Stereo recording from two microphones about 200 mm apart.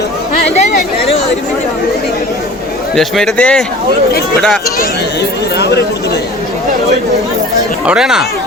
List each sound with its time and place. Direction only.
2.9 s a man's voice: centre (ahead or behind)
5.5 s speech: 55° left (ahead or behind)
7.9 s a man's voice: 5° right (ahead or behind)